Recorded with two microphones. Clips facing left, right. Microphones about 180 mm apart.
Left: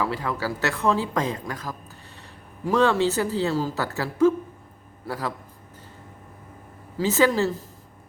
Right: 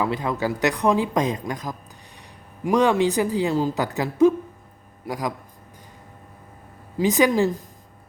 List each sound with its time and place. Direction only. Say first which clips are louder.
0.0 s speech: right 3 dB; 20° right (ahead or behind)
6.9 s speech: right 2 dB; 15° right (ahead or behind)